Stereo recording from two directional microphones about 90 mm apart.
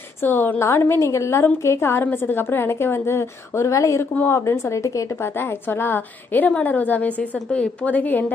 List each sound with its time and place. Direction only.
0.2 s a woman's voice: 25° left (ahead or behind)
4.1 s a woman's voice: 25° left (ahead or behind)
5.1 s a woman's voice: 25° left (ahead or behind)